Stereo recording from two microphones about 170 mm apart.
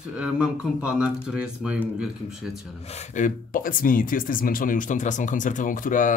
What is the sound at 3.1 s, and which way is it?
Speech, 50° left (ahead or behind).